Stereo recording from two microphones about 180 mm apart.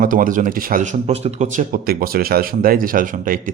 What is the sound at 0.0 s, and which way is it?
Speech, 50° right (ahead or behind).